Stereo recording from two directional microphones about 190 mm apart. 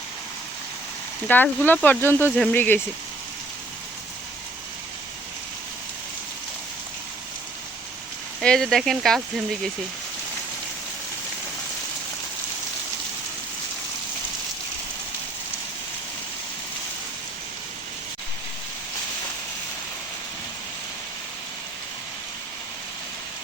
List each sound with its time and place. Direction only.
1.3 s speech: 10° left (ahead or behind)
8.4 s speech: centre (ahead or behind)